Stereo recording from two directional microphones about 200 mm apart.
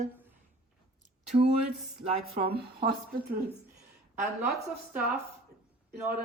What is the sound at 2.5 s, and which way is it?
Speech, 50° right (ahead or behind).